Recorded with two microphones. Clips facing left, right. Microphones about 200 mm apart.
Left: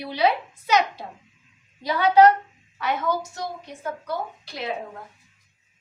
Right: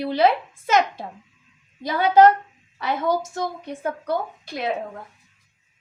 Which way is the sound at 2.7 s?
35° right (ahead or behind).